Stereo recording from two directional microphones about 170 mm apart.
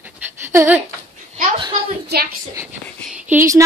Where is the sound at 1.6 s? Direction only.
30° right (ahead or behind).